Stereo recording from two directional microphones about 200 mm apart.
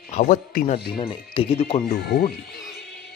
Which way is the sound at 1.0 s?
25° left (ahead or behind).